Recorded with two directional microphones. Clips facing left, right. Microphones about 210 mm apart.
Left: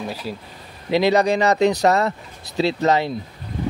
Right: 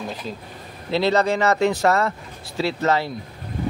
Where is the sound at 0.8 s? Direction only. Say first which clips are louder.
Left 3 dB; 15° left (ahead or behind).